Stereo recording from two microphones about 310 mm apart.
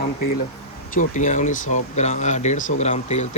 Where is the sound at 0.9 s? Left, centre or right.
Left.